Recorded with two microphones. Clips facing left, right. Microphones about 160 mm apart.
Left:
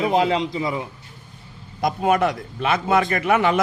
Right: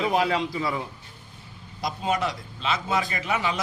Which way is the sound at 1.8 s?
55° left (ahead or behind).